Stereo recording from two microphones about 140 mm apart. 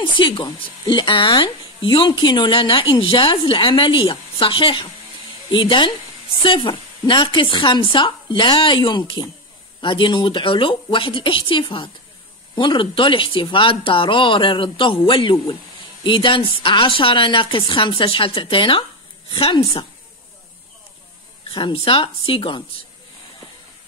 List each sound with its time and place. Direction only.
0.0 s speech: 35° left (ahead or behind)
21.5 s speech: 35° left (ahead or behind)